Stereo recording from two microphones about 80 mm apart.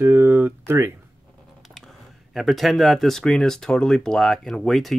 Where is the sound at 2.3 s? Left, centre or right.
Centre.